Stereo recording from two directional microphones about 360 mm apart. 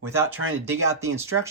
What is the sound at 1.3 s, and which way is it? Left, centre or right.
Speech, right.